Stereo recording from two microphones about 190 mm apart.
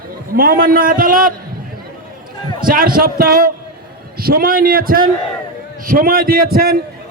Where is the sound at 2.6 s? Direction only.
50° right (ahead or behind).